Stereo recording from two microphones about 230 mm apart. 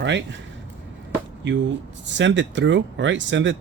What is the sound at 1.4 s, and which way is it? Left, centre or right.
Speech, right.